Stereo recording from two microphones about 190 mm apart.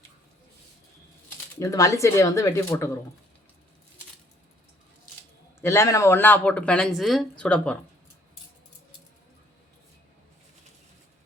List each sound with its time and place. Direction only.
1.5 s speech: 15° left (ahead or behind)
5.5 s speech: 15° left (ahead or behind)